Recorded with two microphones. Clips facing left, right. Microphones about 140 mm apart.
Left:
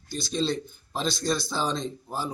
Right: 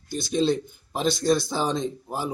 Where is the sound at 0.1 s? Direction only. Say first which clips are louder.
Right 4 dB; 50° right (ahead or behind).